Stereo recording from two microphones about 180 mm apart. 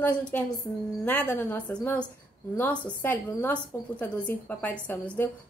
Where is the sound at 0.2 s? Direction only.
10° left (ahead or behind).